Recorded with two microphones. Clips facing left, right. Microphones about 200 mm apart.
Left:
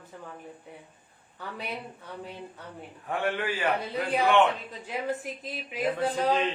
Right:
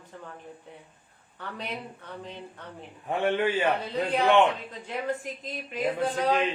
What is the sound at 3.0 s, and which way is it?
Speech, 20° right (ahead or behind).